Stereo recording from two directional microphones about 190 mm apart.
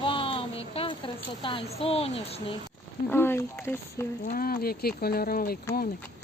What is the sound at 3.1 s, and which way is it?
Speech, 10° left (ahead or behind).